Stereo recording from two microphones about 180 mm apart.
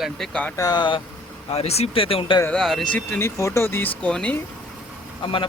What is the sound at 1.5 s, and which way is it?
Speech, 35° left (ahead or behind).